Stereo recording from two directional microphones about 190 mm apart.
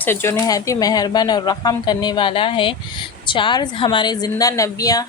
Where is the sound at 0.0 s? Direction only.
10° left (ahead or behind).